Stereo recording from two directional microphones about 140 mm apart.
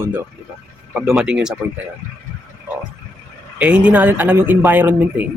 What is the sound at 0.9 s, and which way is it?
Speech, 5° right (ahead or behind).